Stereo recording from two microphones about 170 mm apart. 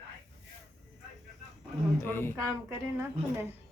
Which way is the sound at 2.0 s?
15° left (ahead or behind).